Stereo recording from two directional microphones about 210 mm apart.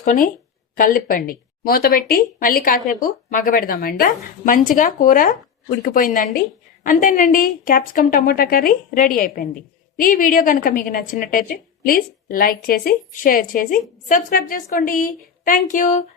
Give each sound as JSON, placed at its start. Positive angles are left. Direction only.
{"t": 0.0, "sound": "a woman's voice", "side_deg": 40}